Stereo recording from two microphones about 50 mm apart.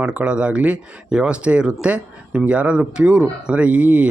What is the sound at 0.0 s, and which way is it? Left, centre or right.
Speech, right.